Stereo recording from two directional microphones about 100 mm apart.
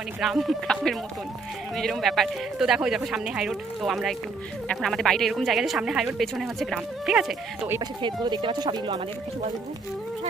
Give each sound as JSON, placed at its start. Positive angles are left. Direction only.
{"t": 0.2, "sound": "speech", "side_deg": 0}
{"t": 7.8, "sound": "speech", "side_deg": -45}